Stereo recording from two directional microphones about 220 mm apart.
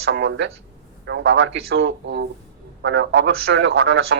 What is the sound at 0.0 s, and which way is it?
A man's voice, 55° right (ahead or behind).